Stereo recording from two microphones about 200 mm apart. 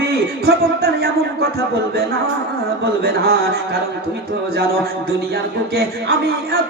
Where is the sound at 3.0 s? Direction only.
50° right (ahead or behind).